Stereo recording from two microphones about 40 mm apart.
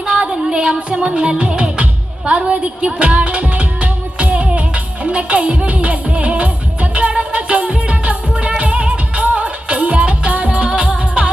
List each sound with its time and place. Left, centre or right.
0.0 s music: right